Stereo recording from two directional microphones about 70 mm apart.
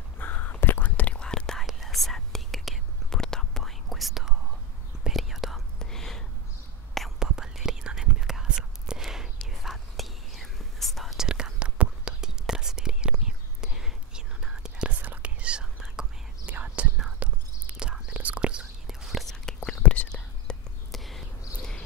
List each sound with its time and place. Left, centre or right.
0.2 s whispering: left; by 6.2 s centre
7.2 s whispering: centre
16.4 s whispering: right
19.2 s whispering: centre
19.8 s whispering: centre